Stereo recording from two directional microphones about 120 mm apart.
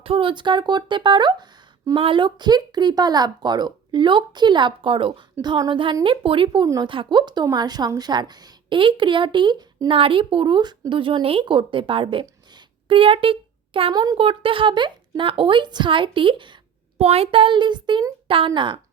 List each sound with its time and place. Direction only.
0.0 s a woman's voice: 50° right (ahead or behind)
9.9 s a woman's voice: 50° right (ahead or behind)
12.2 s a sound: 35° right (ahead or behind)
13.9 s a woman's voice: 35° right (ahead or behind)
14.2 s a woman's voice: 50° right (ahead or behind)
17.0 s a woman's voice: 60° right (ahead or behind); by 18.8 s 40° right (ahead or behind)